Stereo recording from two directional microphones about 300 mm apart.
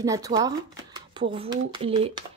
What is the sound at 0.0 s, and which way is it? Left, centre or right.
A woman's voice, centre.